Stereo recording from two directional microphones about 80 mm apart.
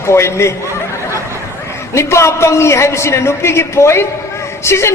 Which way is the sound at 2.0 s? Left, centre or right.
Left.